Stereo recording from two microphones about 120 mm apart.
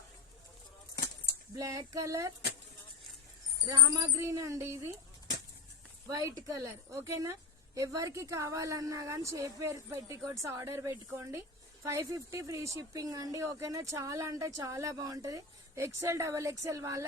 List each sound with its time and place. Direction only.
1.5 s speech: 30° right (ahead or behind)
3.7 s a sound: 35° right (ahead or behind)
4.2 s speech: 25° right (ahead or behind)
6.1 s speech: 30° right (ahead or behind)